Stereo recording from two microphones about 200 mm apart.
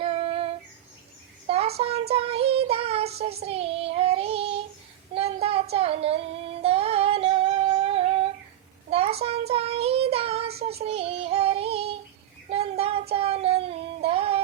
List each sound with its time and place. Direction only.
0.0 s female singing: 30° right (ahead or behind)
1.5 s child singing: 30° right (ahead or behind)
8.9 s a sound: 30° right (ahead or behind)
9.5 s child singing: 30° right (ahead or behind)
12.5 s music: 30° right (ahead or behind)